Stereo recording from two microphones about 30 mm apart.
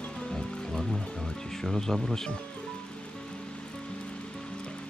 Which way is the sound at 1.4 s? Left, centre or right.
Centre.